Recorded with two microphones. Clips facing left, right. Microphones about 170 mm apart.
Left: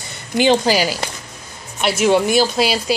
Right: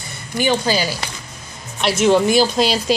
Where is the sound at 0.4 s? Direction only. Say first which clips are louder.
Left 4 dB; 20° left (ahead or behind).